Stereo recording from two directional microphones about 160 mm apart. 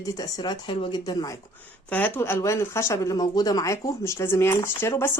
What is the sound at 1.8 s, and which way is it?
Speech, 10° left (ahead or behind).